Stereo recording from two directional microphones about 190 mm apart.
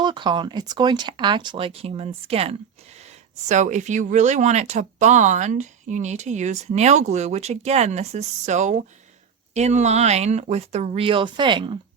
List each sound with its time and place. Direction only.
0.0 s speech: 25° right (ahead or behind)